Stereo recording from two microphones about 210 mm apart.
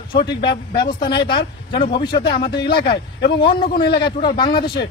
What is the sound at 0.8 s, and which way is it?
Speech, 20° left (ahead or behind).